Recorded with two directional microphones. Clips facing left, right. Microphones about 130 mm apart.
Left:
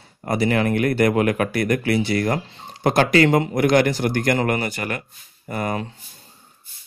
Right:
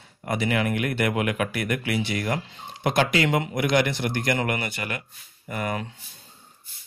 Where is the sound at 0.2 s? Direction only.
40° left (ahead or behind).